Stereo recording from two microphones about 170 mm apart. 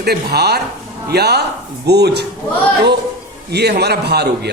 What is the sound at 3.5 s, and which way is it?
Speech, 75° right (ahead or behind).